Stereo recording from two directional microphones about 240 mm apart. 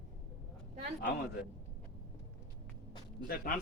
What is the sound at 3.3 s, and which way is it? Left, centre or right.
Speech, left.